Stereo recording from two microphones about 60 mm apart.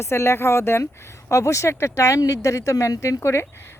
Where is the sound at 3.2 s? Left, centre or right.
Left.